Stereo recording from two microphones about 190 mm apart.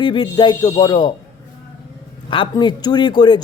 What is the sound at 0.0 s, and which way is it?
A man's voice, 25° left (ahead or behind).